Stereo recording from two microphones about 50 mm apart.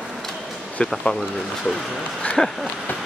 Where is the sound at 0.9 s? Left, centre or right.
Centre.